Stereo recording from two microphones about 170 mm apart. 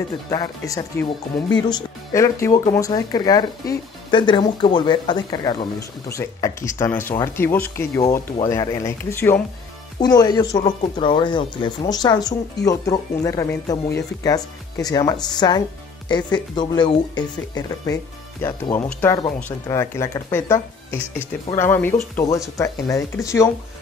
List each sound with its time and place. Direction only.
0.3 s speech: 20° left (ahead or behind)
18.8 s speech: 10° left (ahead or behind)